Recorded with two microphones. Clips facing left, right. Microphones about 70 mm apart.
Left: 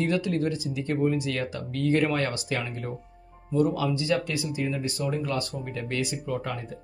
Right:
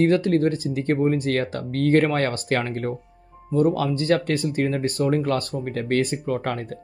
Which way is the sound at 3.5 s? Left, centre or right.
Right.